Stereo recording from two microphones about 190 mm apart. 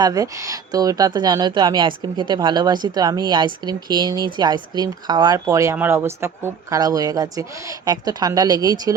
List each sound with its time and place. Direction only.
0.0 s speech: 20° right (ahead or behind)